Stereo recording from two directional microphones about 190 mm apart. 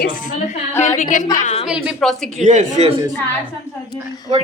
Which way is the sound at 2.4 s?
40° right (ahead or behind).